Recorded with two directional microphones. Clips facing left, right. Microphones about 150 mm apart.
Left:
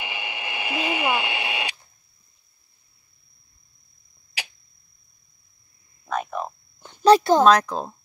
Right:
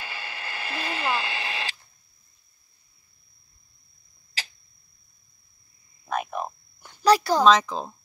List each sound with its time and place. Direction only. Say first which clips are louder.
0.0 s radio: left 4 dB; 15° left (ahead or behind)
6.1 s frog: left 1 dB; 15° right (ahead or behind)
6.8 s a sound: left 4 dB; 20° left (ahead or behind)
7.4 s speech: left 2 dB; centre (ahead or behind)